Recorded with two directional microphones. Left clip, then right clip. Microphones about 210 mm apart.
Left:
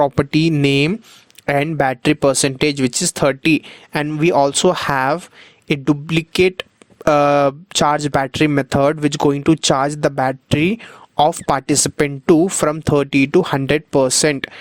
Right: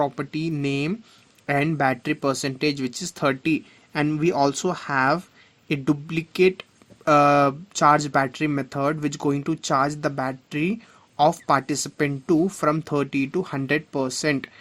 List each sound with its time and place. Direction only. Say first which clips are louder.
0.0 s speech: left 10 dB; 40° left (ahead or behind)